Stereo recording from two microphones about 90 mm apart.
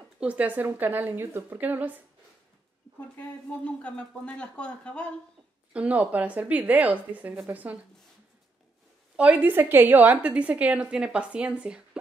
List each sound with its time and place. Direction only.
0.2 s a woman's voice: 15° right (ahead or behind)
3.2 s speech: 15° left (ahead or behind)
5.7 s a woman's voice: 15° right (ahead or behind)
9.1 s a woman's voice: 15° right (ahead or behind)